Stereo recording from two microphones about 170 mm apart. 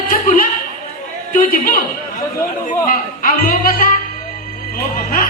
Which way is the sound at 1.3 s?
55° left (ahead or behind).